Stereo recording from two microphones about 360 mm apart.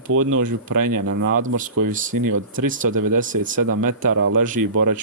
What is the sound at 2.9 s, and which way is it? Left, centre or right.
Speech, right.